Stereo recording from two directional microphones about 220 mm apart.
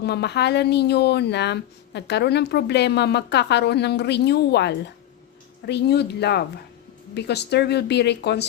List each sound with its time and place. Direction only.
0.0 s a woman's voice: 50° left (ahead or behind)